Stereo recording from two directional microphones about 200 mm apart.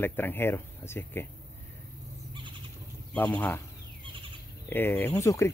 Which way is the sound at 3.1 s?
10° left (ahead or behind).